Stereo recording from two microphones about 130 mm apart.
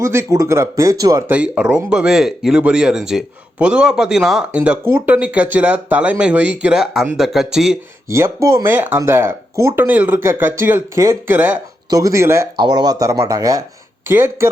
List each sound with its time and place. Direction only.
0.0 s speech: 20° right (ahead or behind)
1.3 s speech: 10° right (ahead or behind)
8.1 s speech: 25° right (ahead or behind)
11.9 s speech: 25° right (ahead or behind)
12.5 s speech: 35° right (ahead or behind)